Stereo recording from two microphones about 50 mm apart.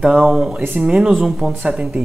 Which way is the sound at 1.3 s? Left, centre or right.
Centre.